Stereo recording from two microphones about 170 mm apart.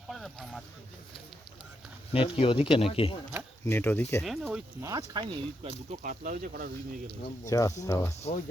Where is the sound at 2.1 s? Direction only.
35° left (ahead or behind).